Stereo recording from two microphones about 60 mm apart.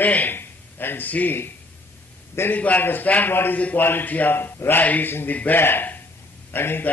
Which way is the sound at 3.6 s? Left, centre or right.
Left.